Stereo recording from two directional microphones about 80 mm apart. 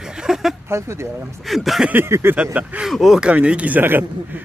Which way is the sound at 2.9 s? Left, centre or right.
Centre.